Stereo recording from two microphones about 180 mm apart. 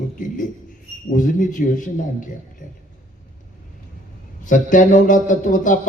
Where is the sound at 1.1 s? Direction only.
45° left (ahead or behind).